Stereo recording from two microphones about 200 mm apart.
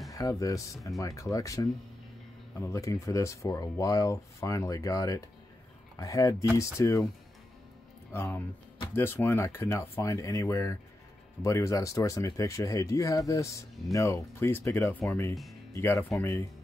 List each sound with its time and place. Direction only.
0.1 s speech: 15° left (ahead or behind)
8.1 s speech: 10° left (ahead or behind)